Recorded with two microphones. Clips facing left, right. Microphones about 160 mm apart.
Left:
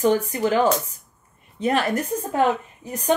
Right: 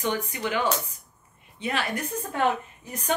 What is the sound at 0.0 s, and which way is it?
Speech, 35° left (ahead or behind).